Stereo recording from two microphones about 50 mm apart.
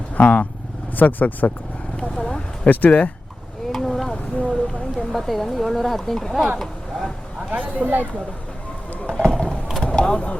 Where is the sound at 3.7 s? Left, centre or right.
Centre.